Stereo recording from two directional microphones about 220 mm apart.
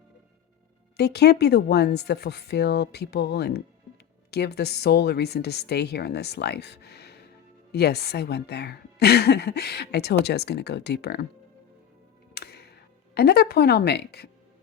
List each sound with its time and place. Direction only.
0.9 s a woman's voice: 50° left (ahead or behind)
12.3 s music: 45° left (ahead or behind)
13.1 s a woman's voice: 45° left (ahead or behind)